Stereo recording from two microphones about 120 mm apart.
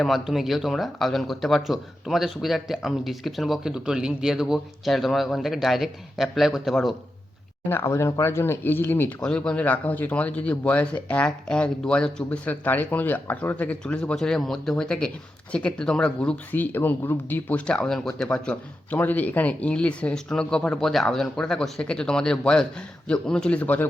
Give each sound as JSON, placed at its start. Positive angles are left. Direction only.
{"t": 0.0, "sound": "speech", "side_deg": 0}
{"t": 7.7, "sound": "speech", "side_deg": 20}
{"t": 9.2, "sound": "speech", "side_deg": 5}